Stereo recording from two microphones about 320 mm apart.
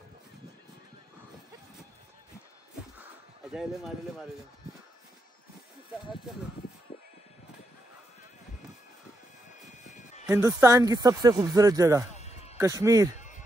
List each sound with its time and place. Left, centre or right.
3.5 s speech: centre
10.2 s speech: centre
12.1 s music: centre
12.5 s speech: centre